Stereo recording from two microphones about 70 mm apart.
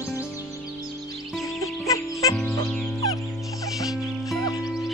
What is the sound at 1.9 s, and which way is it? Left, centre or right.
Music, left.